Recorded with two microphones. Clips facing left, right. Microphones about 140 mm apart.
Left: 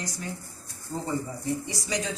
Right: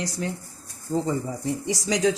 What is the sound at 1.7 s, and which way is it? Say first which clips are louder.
Speech: right 9 dB; 90° right.